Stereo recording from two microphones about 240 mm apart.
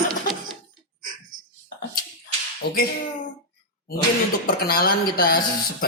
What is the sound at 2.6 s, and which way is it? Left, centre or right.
Speech, left.